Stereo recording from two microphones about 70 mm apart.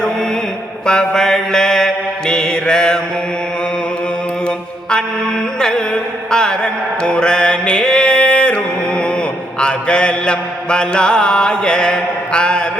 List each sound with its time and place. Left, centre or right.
0.9 s mantra: centre
4.4 s mantra: centre